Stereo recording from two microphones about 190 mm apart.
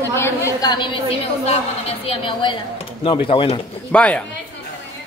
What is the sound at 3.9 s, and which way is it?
Speech, 5° left (ahead or behind).